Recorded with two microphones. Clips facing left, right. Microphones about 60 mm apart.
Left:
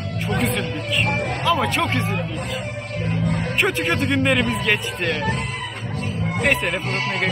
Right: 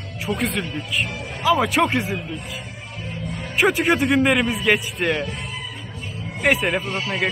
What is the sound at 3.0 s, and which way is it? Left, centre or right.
Music, left.